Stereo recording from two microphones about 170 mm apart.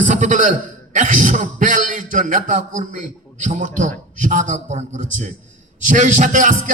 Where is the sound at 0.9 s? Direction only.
45° right (ahead or behind).